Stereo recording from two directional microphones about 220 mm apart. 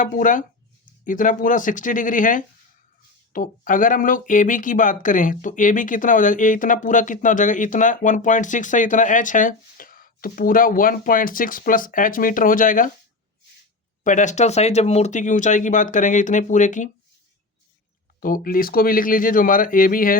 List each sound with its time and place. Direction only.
0.0 s speech: 35° left (ahead or behind)
14.0 s speech: 35° left (ahead or behind)
18.2 s speech: 40° left (ahead or behind)